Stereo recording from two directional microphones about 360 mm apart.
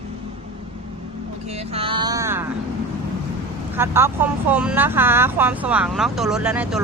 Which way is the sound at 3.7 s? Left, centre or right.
Centre.